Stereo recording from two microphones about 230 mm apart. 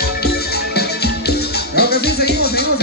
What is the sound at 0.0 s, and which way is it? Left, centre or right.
Music, left.